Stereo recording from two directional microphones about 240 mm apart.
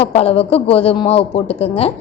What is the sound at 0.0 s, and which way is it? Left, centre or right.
A woman's voice, left.